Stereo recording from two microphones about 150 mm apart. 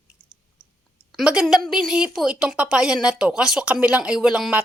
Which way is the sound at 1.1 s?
5° right (ahead or behind).